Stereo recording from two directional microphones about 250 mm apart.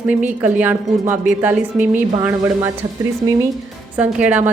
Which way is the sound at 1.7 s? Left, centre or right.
Right.